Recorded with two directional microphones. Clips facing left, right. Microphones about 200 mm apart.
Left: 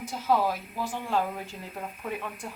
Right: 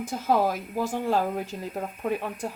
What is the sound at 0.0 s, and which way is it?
Speech, 50° right (ahead or behind).